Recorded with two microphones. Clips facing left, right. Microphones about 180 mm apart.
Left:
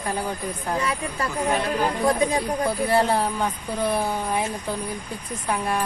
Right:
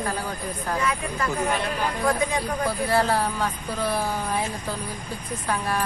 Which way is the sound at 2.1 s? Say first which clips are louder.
Left 2 dB; 35° left (ahead or behind).